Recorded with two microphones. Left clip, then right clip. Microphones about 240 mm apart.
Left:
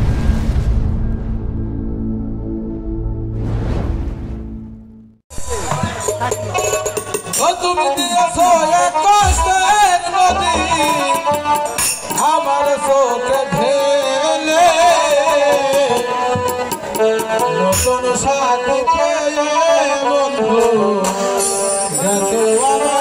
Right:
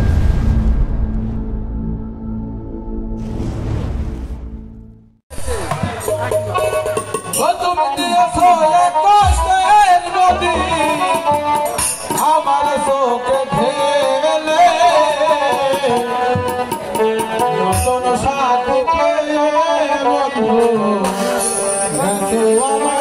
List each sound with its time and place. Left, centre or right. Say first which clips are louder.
6.3 s music: right 2 dB; left